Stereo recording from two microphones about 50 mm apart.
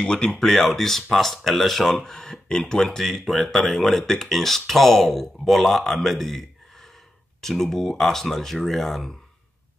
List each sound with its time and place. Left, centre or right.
0.0 s speech: centre
0.5 s speech: centre
7.4 s speech: centre